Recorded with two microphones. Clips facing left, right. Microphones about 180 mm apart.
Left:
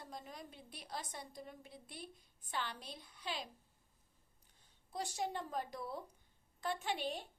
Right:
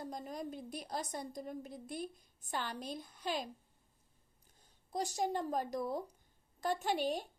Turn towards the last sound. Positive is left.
turn(degrees=-45)  # may be behind; listen again after turning